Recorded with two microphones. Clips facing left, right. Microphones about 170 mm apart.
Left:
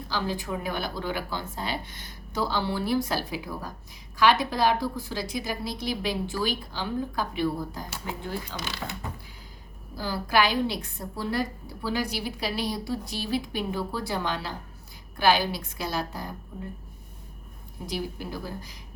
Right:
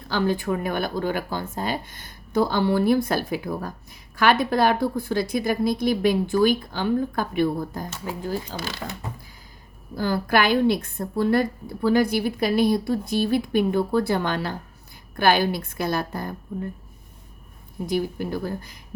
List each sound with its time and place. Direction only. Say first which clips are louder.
0.1 s a woman's voice: right 7 dB; 55° right (ahead or behind)
8.2 s speech: right 8 dB; 40° right (ahead or behind)
9.9 s a woman's voice: right 4 dB; 55° right (ahead or behind)
17.8 s a woman's voice: right 8 dB; 55° right (ahead or behind)